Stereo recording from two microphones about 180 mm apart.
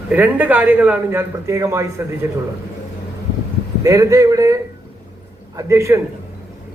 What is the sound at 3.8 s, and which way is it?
A man's voice, 20° right (ahead or behind).